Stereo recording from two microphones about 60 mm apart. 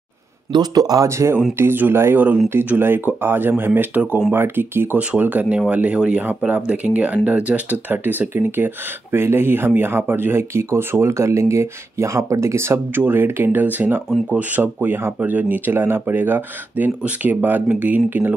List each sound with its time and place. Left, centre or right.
0.7 s speech: right
1.0 s speech: right
1.6 s speech: right